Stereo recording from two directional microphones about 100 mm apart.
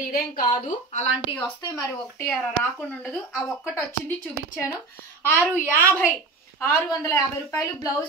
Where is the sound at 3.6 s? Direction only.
25° left (ahead or behind).